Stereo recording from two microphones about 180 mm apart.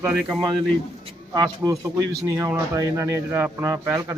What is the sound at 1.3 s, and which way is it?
Speech, 20° right (ahead or behind).